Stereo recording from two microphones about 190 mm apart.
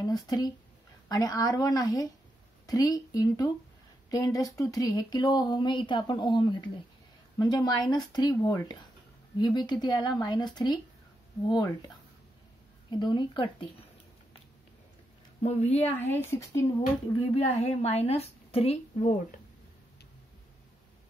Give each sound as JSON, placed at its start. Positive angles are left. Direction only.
{"t": 0.0, "sound": "speech", "side_deg": 20}
{"t": 12.9, "sound": "speech", "side_deg": 25}
{"t": 15.4, "sound": "a woman's voice", "side_deg": 35}
{"t": 16.1, "sound": "speech", "side_deg": 10}
{"t": 17.3, "sound": "a woman's voice", "side_deg": 35}